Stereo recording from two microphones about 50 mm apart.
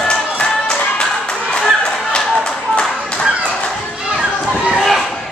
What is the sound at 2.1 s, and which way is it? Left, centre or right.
Clapping, centre.